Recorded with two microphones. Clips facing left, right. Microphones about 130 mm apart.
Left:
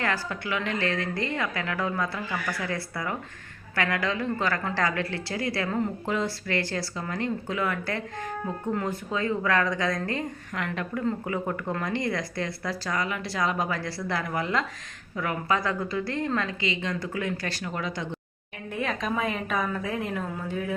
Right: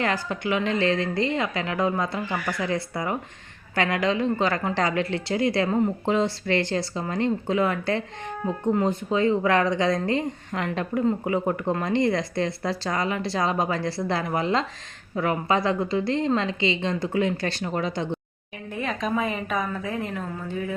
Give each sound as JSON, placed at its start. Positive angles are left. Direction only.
{"t": 0.0, "sound": "speech", "side_deg": -20}
{"t": 18.7, "sound": "a woman's voice", "side_deg": 0}